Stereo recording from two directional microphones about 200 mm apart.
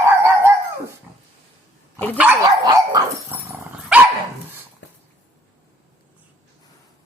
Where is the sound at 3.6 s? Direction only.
5° right (ahead or behind).